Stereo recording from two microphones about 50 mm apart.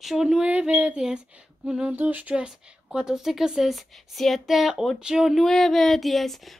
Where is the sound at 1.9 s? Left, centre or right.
Right.